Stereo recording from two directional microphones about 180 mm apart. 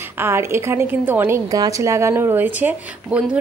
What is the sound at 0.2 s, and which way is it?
Speech, 15° right (ahead or behind).